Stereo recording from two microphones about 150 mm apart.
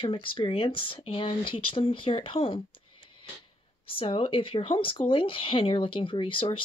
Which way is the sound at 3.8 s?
35° left (ahead or behind).